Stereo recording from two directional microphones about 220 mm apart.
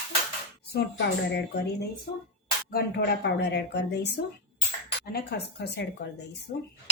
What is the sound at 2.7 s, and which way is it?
Speech, 45° left (ahead or behind).